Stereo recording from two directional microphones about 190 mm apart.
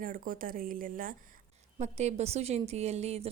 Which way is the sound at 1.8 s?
35° right (ahead or behind).